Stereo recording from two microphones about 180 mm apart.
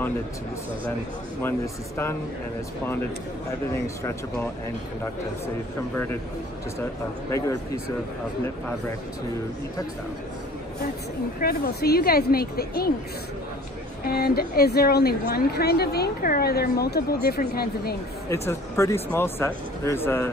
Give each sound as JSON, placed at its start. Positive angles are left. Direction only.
{"t": 3.7, "sound": "speech", "side_deg": 15}
{"t": 6.8, "sound": "speech", "side_deg": 15}
{"t": 11.4, "sound": "a woman's voice", "side_deg": 60}
{"t": 14.0, "sound": "a woman's voice", "side_deg": 60}
{"t": 18.3, "sound": "speech", "side_deg": 15}